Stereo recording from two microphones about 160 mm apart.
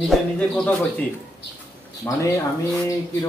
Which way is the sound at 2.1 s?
20° left (ahead or behind).